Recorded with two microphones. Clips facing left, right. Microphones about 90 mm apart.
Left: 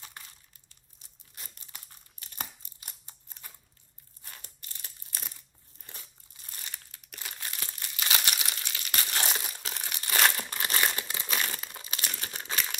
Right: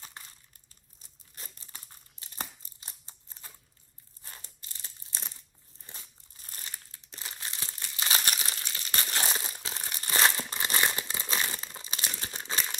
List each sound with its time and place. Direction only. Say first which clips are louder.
1.4 s crumpling: even; 30° right (ahead or behind)